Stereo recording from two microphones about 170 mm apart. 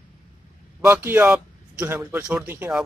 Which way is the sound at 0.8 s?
15° right (ahead or behind).